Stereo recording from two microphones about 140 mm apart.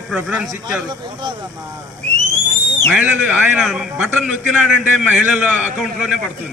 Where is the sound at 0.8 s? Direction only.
35° right (ahead or behind).